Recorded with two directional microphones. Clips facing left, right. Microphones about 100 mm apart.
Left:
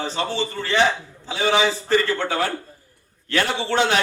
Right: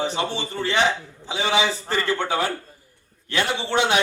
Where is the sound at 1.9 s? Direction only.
15° right (ahead or behind).